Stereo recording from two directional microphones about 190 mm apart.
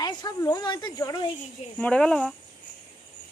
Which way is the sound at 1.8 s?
5° left (ahead or behind).